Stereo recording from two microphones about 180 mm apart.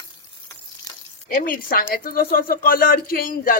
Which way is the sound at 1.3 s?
50° left (ahead or behind).